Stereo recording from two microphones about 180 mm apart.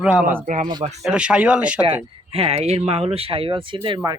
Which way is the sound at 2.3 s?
35° right (ahead or behind).